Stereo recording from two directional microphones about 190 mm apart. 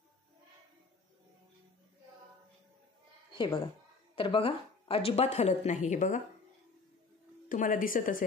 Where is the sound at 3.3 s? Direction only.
25° left (ahead or behind); by 6.2 s 40° left (ahead or behind).